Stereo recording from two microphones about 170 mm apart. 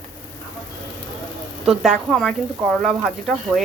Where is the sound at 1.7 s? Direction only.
Centre (ahead or behind).